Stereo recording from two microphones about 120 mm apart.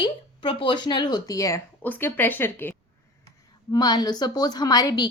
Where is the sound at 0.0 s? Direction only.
45° left (ahead or behind); by 1.6 s 25° left (ahead or behind).